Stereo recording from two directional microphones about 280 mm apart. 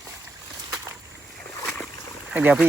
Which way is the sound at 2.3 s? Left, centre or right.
Centre.